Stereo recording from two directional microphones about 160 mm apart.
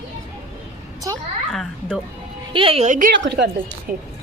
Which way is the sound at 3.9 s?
65° right (ahead or behind).